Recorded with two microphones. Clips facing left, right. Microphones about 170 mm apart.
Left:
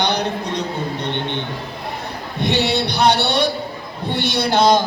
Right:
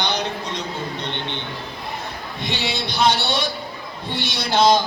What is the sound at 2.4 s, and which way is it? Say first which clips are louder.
A woman's voice: left 8 dB; 60° left (ahead or behind).